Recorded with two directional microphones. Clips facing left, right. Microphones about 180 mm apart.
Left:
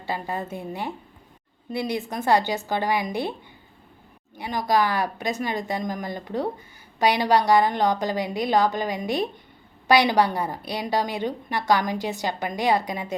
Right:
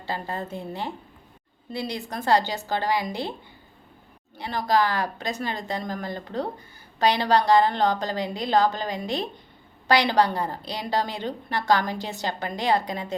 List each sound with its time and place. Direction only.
0.1 s a woman's voice: 15° left (ahead or behind)
4.4 s a woman's voice: 15° left (ahead or behind)